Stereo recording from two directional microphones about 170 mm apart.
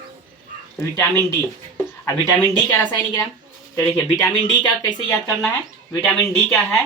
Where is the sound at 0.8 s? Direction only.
15° left (ahead or behind).